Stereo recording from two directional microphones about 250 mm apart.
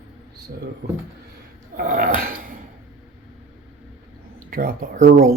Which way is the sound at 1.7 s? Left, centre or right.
Right.